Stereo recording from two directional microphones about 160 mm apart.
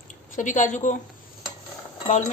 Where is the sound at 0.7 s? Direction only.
50° left (ahead or behind).